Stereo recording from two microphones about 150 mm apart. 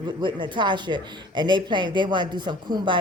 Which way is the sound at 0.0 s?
30° right (ahead or behind).